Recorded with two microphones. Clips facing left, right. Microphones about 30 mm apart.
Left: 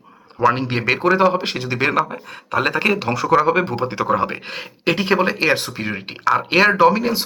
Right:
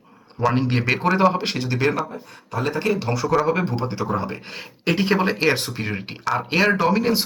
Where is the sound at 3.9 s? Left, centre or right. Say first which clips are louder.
Left 6 dB; left.